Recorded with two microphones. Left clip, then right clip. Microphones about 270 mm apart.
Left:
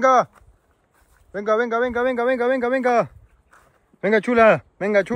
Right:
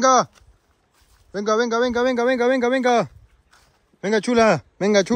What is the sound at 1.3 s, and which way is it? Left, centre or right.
Speech, right.